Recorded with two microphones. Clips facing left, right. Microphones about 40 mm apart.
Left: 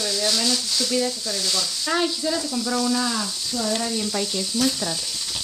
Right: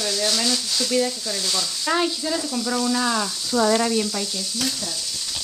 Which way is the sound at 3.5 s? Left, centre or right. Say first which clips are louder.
Right 7 dB; right.